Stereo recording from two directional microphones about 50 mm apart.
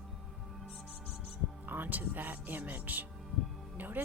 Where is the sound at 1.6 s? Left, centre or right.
Right.